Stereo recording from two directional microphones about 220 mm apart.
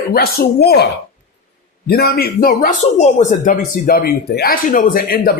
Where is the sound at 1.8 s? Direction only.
45° left (ahead or behind).